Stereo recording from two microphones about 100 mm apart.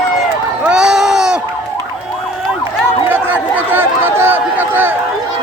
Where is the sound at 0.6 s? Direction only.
5° right (ahead or behind).